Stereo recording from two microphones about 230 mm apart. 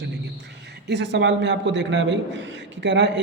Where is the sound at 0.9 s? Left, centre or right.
Right.